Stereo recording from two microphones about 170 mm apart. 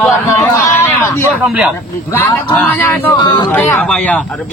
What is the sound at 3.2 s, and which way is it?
Speech, 25° left (ahead or behind).